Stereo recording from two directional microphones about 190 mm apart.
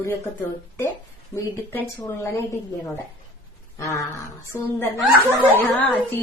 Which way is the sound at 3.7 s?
15° left (ahead or behind).